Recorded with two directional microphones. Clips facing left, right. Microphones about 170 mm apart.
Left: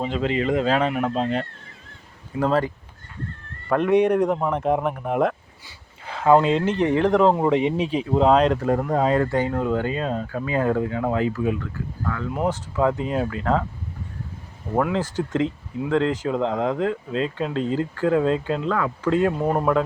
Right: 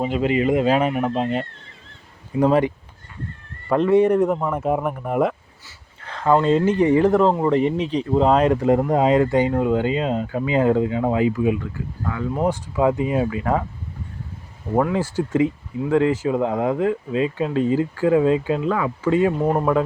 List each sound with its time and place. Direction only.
0.0 s speech: 10° right (ahead or behind)
2.4 s speech: 15° right (ahead or behind)
3.8 s speech: 15° left (ahead or behind)
4.5 s speech: 5° right (ahead or behind)
6.0 s speech: 5° left (ahead or behind)
6.7 s speech: 10° right (ahead or behind)
14.9 s speech: 10° right (ahead or behind)